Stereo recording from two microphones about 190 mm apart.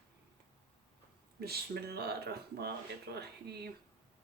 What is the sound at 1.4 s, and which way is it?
Speech, 55° right (ahead or behind).